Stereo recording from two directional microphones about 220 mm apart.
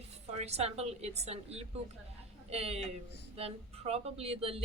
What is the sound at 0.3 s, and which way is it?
Speech, 30° right (ahead or behind).